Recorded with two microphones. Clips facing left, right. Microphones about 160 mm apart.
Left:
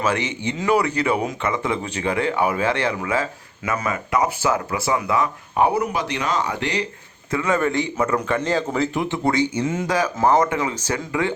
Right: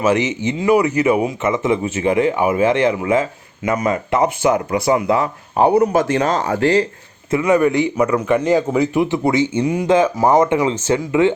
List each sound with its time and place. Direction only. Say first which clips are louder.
0.6 s speech: right 5 dB; 10° right (ahead or behind); by 5.9 s 30° right (ahead or behind)
5.9 s speech: right 7 dB; 45° right (ahead or behind)
7.3 s speech: right 6 dB; 20° right (ahead or behind)